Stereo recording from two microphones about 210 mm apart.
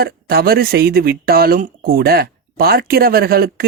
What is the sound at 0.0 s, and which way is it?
Speech, 45° right (ahead or behind).